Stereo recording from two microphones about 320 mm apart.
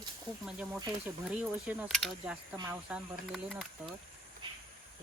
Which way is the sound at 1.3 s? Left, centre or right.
Centre.